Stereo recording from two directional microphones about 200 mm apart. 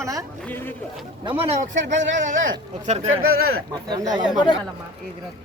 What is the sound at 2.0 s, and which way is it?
Speech, 65° right (ahead or behind).